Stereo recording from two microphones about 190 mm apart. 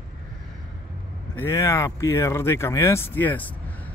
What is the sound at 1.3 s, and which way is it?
Speech, 15° left (ahead or behind).